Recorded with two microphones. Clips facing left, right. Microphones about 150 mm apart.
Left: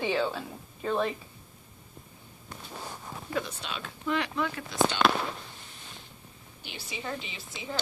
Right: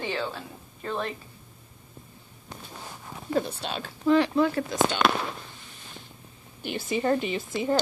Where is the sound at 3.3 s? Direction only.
40° right (ahead or behind).